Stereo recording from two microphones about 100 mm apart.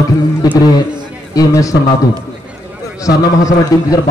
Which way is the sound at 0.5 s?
40° left (ahead or behind).